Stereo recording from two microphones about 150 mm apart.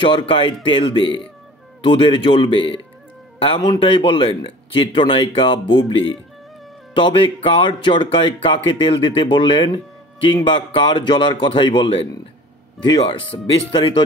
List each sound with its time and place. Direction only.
0.0 s speech: 35° left (ahead or behind)